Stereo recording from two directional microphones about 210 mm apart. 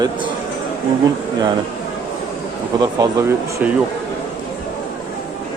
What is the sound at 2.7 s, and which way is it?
Speech, 15° right (ahead or behind).